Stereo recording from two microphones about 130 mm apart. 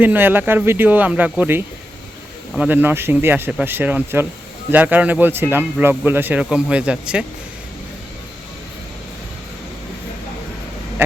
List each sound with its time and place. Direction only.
0.0 s speech: 15° right (ahead or behind)